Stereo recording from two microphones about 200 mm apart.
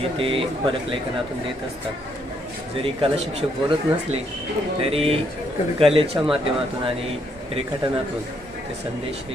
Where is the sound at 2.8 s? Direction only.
30° right (ahead or behind).